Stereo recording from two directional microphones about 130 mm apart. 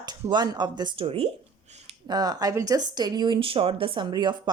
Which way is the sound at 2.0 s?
30° right (ahead or behind).